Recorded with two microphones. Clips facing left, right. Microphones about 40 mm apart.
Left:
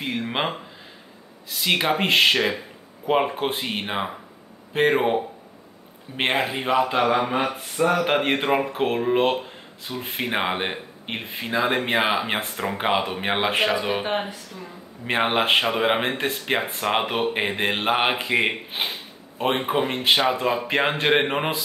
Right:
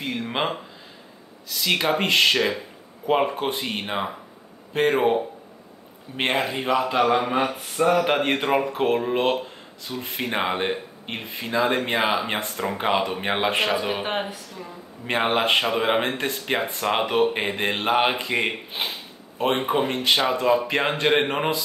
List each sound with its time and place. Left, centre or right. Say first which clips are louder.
0.0 s speech: even; centre
15.0 s speech: even; centre
19.3 s speech: right 1 dB; centre